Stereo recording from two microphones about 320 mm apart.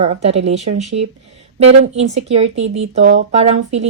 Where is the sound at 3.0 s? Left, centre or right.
Right.